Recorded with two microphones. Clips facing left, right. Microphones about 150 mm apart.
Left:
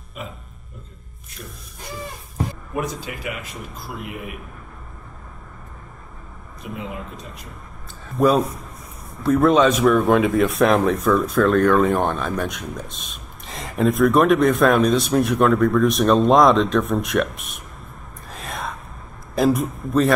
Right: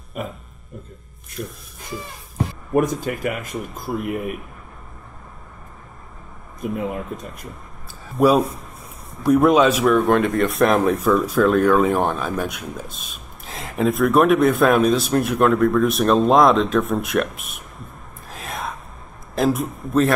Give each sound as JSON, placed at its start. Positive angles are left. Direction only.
{"t": 0.2, "sound": "speech", "side_deg": -50}
{"t": 2.7, "sound": "speech", "side_deg": -50}
{"t": 6.6, "sound": "speech", "side_deg": -50}
{"t": 8.2, "sound": "speech", "side_deg": -10}
{"t": 18.3, "sound": "whispering", "side_deg": 0}
{"t": 19.3, "sound": "speech", "side_deg": 0}